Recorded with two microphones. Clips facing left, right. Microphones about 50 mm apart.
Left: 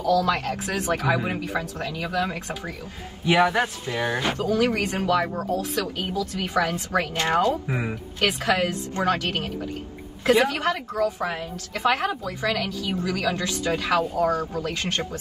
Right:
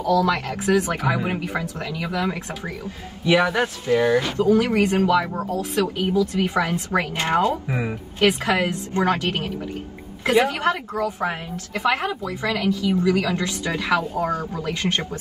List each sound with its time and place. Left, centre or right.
0.3 s a woman's voice: right
3.8 s speech: left
4.4 s a woman's voice: right
7.6 s speech: centre
8.2 s a woman's voice: right